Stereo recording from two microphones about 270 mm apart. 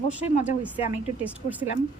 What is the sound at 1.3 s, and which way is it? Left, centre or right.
Speech, centre.